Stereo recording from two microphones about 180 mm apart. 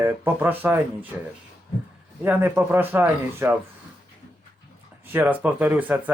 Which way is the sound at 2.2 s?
10° right (ahead or behind).